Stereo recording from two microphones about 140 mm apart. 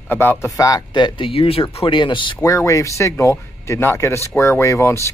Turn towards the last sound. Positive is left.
turn(degrees=20)  # may be behind; listen again after turning